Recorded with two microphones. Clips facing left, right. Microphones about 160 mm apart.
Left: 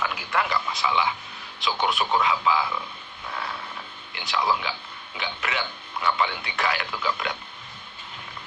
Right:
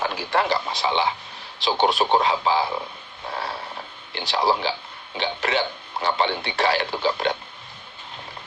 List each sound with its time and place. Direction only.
0.0 s speech: 30° right (ahead or behind)
3.2 s a sound: 35° right (ahead or behind)
5.1 s speech: 35° right (ahead or behind)